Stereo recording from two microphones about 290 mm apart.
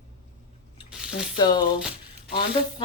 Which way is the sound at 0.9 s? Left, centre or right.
Centre.